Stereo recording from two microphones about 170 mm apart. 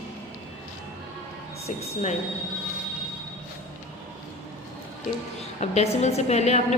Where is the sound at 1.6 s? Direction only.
45° left (ahead or behind).